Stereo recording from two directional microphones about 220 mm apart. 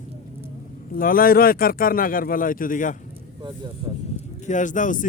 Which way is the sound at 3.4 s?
20° right (ahead or behind).